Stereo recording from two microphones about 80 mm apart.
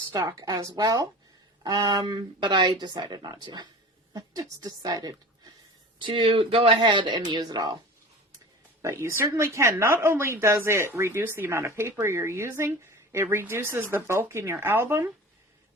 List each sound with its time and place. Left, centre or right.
0.1 s a woman's voice: right
4.1 s a woman's voice: right
6.0 s speech: right
7.3 s speech: right
8.8 s a woman's voice: right